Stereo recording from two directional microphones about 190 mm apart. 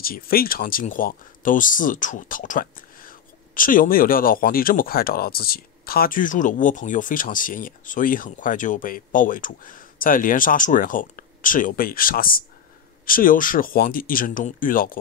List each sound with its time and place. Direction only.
0.0 s speech: 50° left (ahead or behind)